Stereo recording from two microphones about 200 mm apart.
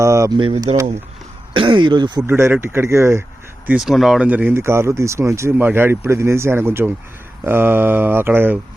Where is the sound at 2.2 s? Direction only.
10° right (ahead or behind).